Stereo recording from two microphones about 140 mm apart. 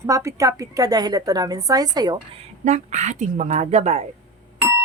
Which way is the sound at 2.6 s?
55° right (ahead or behind).